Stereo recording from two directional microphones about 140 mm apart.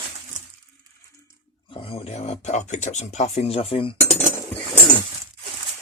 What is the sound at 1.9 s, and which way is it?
Speech, 50° left (ahead or behind).